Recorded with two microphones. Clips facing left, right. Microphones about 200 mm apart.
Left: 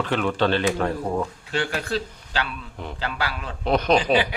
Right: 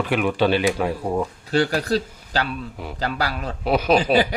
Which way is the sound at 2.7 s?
5° right (ahead or behind).